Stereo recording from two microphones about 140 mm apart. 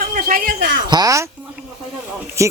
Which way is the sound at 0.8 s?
30° right (ahead or behind).